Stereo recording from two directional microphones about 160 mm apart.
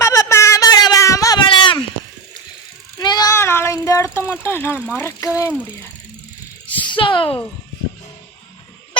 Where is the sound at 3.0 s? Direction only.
25° left (ahead or behind).